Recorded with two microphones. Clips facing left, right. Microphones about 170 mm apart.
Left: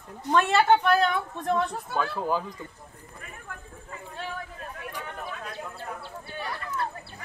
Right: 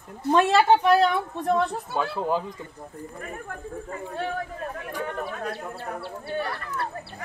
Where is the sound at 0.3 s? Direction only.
30° right (ahead or behind).